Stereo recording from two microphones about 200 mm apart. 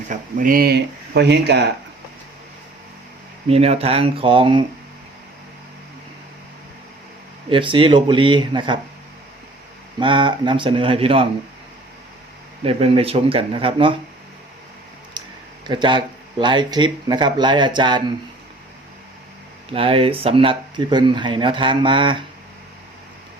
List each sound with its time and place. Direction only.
0.1 s speech: 45° right (ahead or behind)
3.5 s speech: 30° right (ahead or behind)
7.5 s speech: 25° right (ahead or behind)
10.0 s speech: 25° right (ahead or behind)
12.6 s speech: 30° right (ahead or behind)
15.2 s a sound: 20° right (ahead or behind)
15.6 s speech: 25° right (ahead or behind)
19.7 s speech: 30° right (ahead or behind)